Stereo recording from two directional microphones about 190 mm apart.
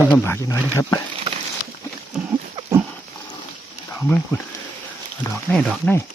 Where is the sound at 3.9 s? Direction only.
15° left (ahead or behind).